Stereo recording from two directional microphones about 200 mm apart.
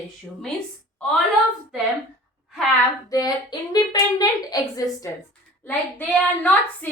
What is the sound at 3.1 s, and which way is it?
Speech, 20° left (ahead or behind).